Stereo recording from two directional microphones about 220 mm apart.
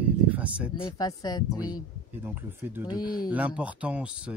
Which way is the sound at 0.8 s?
15° left (ahead or behind).